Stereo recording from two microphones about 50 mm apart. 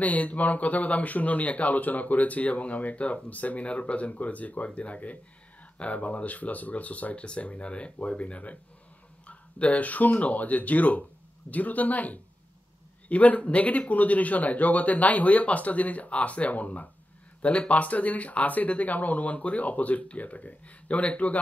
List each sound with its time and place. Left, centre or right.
0.0 s speech: left